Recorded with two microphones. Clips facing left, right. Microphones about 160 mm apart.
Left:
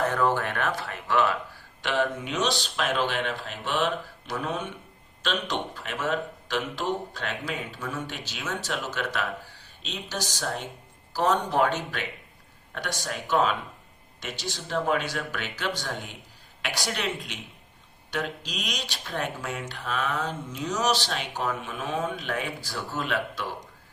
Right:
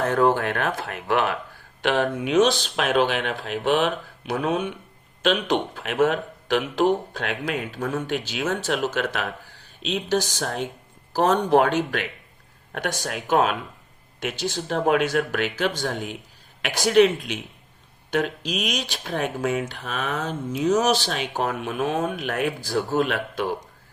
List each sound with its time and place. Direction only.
0.0 s speech: 50° right (ahead or behind)
18.1 s speech: 55° right (ahead or behind)
19.5 s speech: 60° right (ahead or behind)